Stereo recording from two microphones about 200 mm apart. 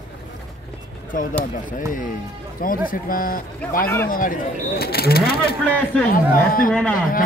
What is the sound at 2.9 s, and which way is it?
Speech, 45° left (ahead or behind).